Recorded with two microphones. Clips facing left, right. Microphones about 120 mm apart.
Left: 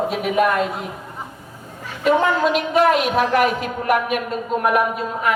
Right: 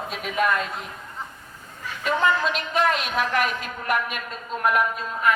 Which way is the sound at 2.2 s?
15° left (ahead or behind).